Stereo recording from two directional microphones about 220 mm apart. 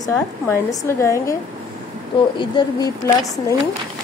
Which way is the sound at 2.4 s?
20° left (ahead or behind).